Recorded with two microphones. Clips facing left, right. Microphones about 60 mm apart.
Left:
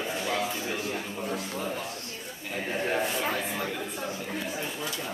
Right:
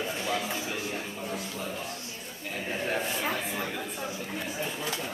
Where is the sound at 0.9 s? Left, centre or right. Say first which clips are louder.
Left 2 dB; left.